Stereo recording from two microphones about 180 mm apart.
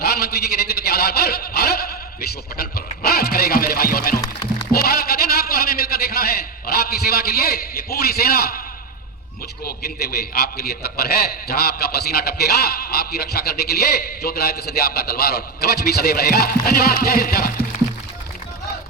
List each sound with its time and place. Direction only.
0.0 s a man's voice: 60° left (ahead or behind)
9.6 s a man's voice: 60° left (ahead or behind)